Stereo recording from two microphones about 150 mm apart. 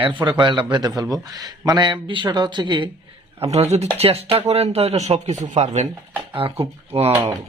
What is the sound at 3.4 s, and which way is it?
Speech, 45° right (ahead or behind).